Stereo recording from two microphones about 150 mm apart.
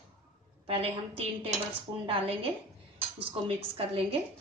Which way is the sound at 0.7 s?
40° right (ahead or behind).